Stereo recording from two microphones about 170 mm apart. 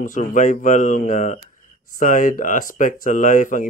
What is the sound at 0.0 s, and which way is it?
Speech, 50° left (ahead or behind).